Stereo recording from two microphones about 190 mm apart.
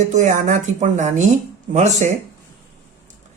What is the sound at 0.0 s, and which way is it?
Speech, 40° right (ahead or behind).